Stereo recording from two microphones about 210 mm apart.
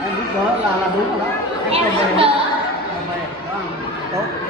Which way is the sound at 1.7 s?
25° right (ahead or behind).